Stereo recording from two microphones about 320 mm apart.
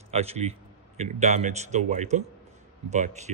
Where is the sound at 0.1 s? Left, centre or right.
Centre.